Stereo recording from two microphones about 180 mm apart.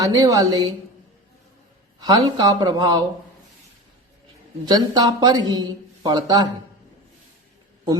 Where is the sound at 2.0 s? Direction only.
20° right (ahead or behind).